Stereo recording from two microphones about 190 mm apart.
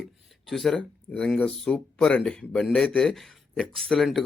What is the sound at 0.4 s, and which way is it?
Speech, centre (ahead or behind).